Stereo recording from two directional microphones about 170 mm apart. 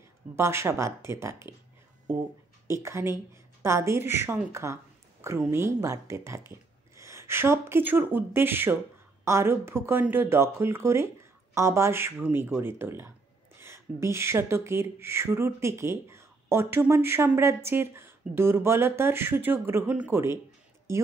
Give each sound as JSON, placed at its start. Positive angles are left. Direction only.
{"t": 0.4, "sound": "speech", "side_deg": -15}
{"t": 2.7, "sound": "speech", "side_deg": -15}